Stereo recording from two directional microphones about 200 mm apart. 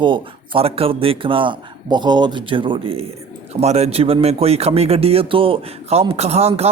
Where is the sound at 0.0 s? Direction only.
25° right (ahead or behind).